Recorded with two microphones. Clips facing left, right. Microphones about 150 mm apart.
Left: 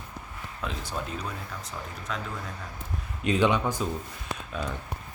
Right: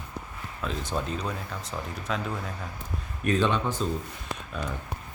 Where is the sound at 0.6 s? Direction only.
15° left (ahead or behind).